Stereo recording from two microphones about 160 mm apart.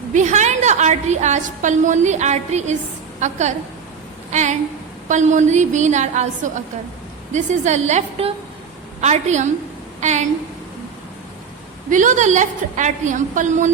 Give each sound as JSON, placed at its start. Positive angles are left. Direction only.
{"t": 0.1, "sound": "a woman's voice", "side_deg": -50}
{"t": 4.3, "sound": "a sound", "side_deg": -45}
{"t": 5.0, "sound": "a woman's voice", "side_deg": -50}
{"t": 11.9, "sound": "a woman's voice", "side_deg": -50}